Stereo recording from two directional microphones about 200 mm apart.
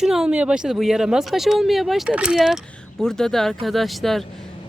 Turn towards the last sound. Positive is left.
turn(degrees=0)  # may be behind; listen again after turning